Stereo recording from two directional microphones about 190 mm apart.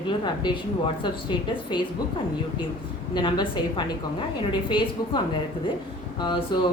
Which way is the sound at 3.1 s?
25° left (ahead or behind).